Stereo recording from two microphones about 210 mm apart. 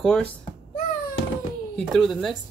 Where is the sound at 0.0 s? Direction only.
5° left (ahead or behind).